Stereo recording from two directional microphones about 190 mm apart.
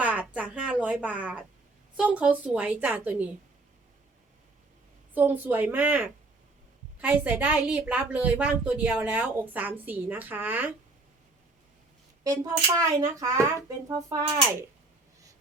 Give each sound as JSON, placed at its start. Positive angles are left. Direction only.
{"t": 0.0, "sound": "a sound", "side_deg": -10}
{"t": 0.3, "sound": "a woman's voice", "side_deg": -5}
{"t": 5.1, "sound": "a woman's voice", "side_deg": -10}
{"t": 12.2, "sound": "a woman's voice", "side_deg": -15}